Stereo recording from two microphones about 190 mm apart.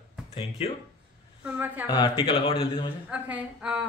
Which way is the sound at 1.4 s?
10° right (ahead or behind).